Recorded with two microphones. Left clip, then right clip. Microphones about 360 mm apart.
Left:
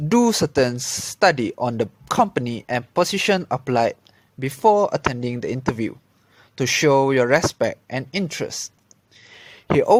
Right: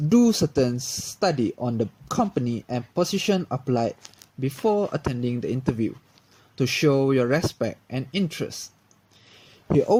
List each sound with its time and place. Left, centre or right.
0.1 s speech: centre
9.6 s speech: left